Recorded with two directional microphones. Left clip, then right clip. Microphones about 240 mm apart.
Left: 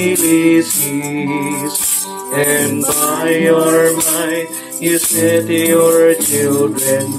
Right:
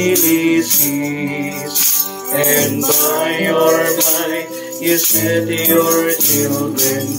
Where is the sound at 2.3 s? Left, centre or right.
Left.